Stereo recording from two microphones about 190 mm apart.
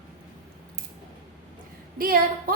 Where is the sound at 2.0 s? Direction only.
50° right (ahead or behind).